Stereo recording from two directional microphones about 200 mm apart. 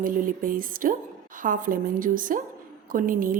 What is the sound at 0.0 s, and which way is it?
A woman's voice, 45° right (ahead or behind).